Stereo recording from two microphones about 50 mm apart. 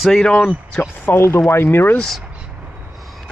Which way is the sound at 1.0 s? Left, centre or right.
Left.